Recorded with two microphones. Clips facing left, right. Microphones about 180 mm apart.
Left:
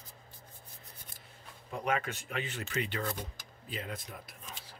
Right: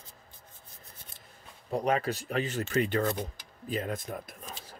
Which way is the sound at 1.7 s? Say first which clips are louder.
Right 6 dB; 35° right (ahead or behind).